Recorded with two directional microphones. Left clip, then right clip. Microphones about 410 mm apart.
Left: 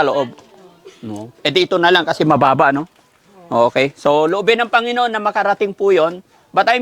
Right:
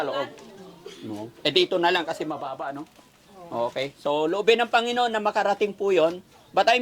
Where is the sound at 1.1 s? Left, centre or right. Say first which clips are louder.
Left 6 dB; left.